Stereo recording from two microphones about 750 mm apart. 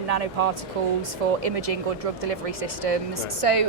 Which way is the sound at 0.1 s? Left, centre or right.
Right.